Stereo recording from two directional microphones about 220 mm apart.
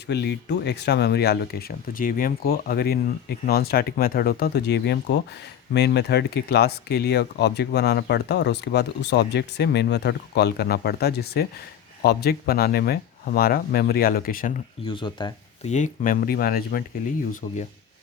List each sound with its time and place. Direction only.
0.1 s speech: 50° left (ahead or behind)
14.8 s speech: 20° left (ahead or behind)
15.7 s speech: 35° left (ahead or behind)